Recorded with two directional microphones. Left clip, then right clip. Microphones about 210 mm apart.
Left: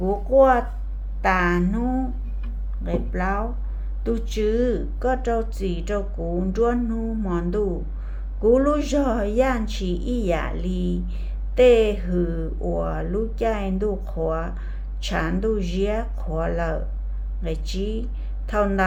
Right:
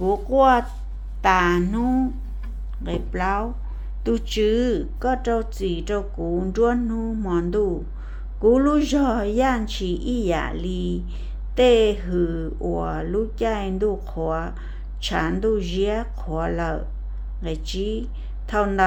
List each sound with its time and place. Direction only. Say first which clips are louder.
0.3 s speech: left 1 dB; 35° right (ahead or behind)